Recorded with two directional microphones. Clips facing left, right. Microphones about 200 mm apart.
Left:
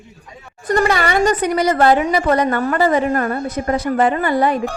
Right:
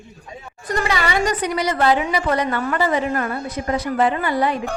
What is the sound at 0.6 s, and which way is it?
A woman's voice, 50° left (ahead or behind).